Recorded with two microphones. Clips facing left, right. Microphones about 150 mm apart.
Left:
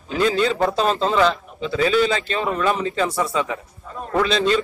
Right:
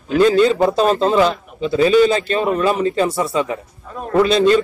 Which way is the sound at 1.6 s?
40° right (ahead or behind).